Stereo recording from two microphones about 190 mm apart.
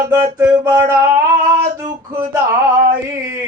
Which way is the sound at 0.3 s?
20° right (ahead or behind).